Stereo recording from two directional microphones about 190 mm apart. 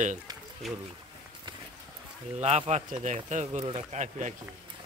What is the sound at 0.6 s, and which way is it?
Speech, centre (ahead or behind).